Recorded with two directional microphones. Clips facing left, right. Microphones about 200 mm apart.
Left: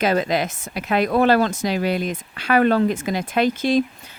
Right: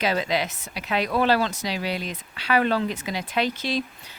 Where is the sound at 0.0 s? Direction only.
50° left (ahead or behind).